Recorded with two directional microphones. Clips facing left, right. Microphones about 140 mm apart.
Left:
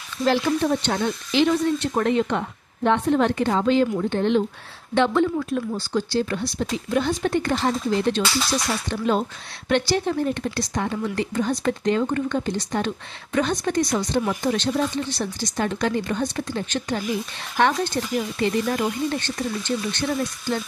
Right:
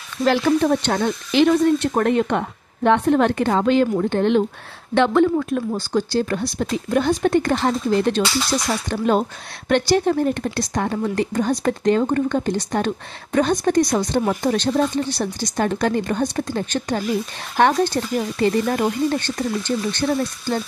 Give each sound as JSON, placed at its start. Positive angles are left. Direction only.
{"t": 0.2, "sound": "speech", "side_deg": -60}